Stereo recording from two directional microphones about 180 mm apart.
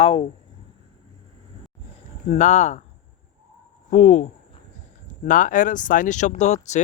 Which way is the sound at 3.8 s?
40° left (ahead or behind).